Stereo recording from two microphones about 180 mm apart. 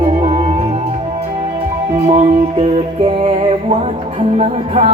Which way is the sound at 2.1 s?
35° right (ahead or behind).